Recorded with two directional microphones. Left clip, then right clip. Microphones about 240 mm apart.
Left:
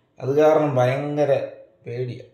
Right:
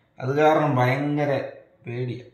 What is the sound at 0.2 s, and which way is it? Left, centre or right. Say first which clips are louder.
Mantra: left 2 dB; centre.